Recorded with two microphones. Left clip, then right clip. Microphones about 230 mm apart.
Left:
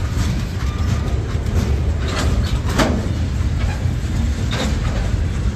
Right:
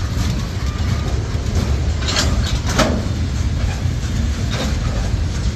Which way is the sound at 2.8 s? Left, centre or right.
Right.